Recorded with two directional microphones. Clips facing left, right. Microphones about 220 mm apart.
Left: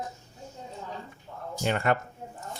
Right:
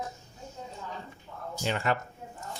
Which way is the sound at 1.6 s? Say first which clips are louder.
Left 3 dB; 55° left (ahead or behind).